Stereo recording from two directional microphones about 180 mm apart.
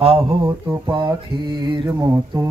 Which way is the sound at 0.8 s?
25° right (ahead or behind).